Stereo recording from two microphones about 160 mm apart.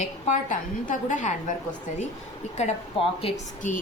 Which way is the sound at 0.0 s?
50° left (ahead or behind).